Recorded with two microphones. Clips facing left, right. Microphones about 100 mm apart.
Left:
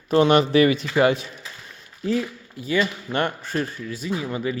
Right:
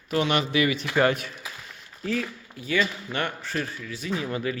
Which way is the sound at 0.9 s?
20° left (ahead or behind).